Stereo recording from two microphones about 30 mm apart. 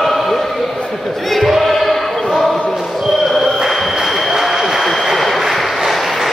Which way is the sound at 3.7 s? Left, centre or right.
Centre.